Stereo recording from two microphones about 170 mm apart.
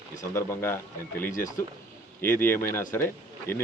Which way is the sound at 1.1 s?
55° left (ahead or behind).